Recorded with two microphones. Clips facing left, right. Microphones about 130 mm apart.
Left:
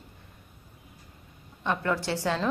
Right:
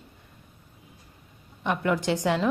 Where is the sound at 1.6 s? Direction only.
15° right (ahead or behind).